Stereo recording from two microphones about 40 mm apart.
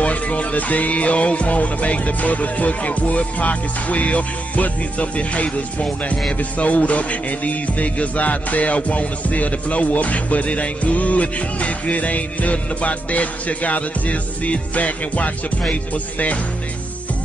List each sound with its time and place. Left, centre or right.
0.0 s music: left